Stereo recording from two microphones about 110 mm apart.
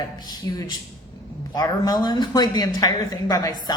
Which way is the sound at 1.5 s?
35° left (ahead or behind).